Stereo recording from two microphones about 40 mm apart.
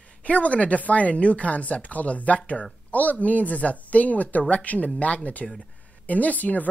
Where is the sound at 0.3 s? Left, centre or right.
Left.